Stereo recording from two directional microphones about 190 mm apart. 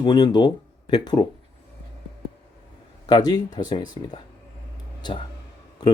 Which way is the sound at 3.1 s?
20° left (ahead or behind).